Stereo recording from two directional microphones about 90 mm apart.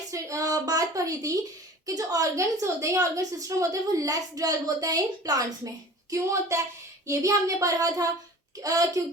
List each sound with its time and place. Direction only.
0.1 s a woman's voice: 40° right (ahead or behind)